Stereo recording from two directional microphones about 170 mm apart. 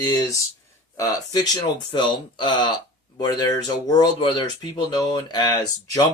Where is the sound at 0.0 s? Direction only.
20° left (ahead or behind).